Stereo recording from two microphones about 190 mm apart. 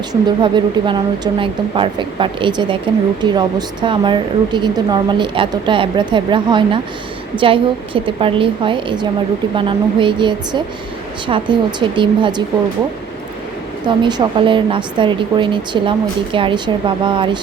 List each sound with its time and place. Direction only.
0.1 s speech: 25° right (ahead or behind)
13.8 s speech: 25° right (ahead or behind)